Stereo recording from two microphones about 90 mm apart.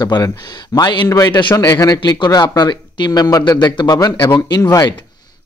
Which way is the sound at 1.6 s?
40° left (ahead or behind).